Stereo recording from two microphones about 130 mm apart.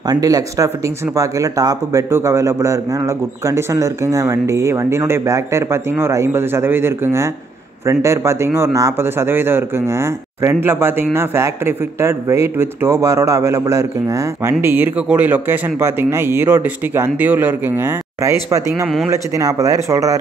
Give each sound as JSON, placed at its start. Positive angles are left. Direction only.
{"t": 0.0, "sound": "speech", "side_deg": -30}